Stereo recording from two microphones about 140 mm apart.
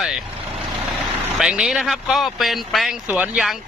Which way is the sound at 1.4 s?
5° right (ahead or behind).